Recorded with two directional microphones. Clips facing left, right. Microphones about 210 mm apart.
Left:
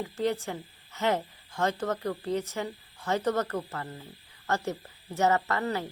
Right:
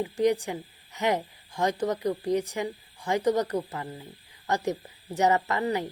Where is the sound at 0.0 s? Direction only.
15° right (ahead or behind).